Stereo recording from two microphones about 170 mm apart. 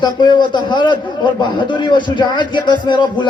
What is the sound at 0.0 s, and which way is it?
A man's voice, 25° left (ahead or behind).